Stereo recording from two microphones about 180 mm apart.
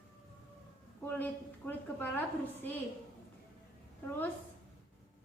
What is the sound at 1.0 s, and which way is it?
A woman's voice, 10° left (ahead or behind).